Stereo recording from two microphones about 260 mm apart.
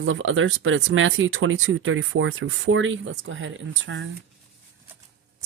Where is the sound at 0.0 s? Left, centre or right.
Right.